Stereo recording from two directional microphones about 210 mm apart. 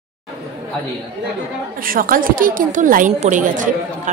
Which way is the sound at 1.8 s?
40° right (ahead or behind).